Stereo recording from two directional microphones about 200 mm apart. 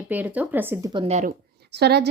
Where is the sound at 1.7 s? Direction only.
55° right (ahead or behind).